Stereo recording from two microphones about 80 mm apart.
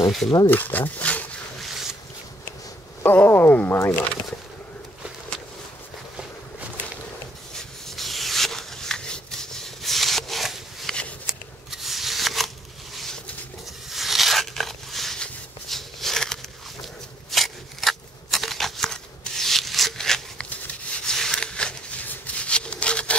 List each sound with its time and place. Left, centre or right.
0.5 s speech: left
1.6 s zipper: centre
3.0 s speech: left
3.9 s speech: centre
7.5 s rub: centre
11.7 s scissors: centre
12.9 s a sound: centre
22.0 s rub: left